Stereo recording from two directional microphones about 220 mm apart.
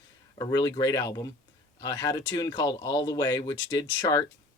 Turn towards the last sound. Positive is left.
turn(degrees=15)  # may be behind; listen again after turning